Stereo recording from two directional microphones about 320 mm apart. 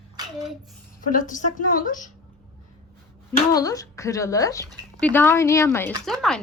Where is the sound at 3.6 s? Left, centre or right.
Centre.